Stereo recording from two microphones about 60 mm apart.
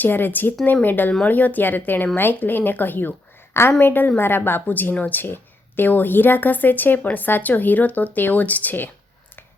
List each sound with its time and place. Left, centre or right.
0.0 s a woman's voice: left